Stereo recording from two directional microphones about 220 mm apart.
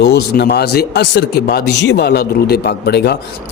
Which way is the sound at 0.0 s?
50° left (ahead or behind).